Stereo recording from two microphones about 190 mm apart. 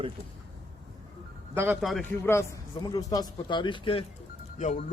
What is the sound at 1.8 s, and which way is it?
Speech, centre (ahead or behind).